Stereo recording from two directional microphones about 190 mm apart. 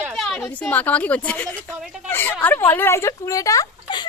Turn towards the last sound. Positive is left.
turn(degrees=20)  # may be behind; listen again after turning